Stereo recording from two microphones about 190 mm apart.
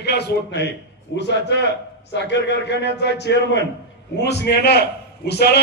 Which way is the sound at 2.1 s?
65° left (ahead or behind).